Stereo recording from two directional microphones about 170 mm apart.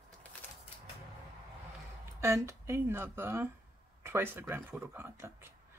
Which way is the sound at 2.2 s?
15° right (ahead or behind).